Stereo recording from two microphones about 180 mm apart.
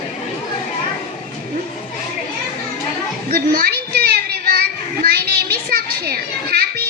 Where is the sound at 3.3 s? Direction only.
55° right (ahead or behind).